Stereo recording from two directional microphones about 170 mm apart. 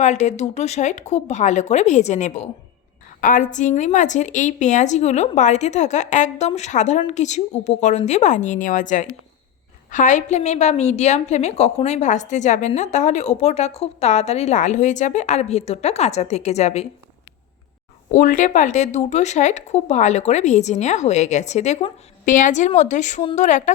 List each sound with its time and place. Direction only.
0.0 s a woman's voice: 40° left (ahead or behind)
18.1 s speech: 50° left (ahead or behind)